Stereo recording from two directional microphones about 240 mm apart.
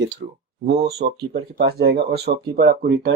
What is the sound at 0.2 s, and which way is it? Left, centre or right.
Speech, right.